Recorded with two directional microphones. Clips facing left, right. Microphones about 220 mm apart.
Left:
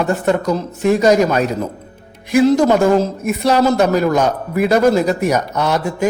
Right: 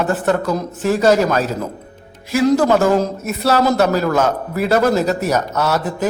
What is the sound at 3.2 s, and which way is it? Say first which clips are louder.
A man's voice: left 2 dB; 10° left (ahead or behind).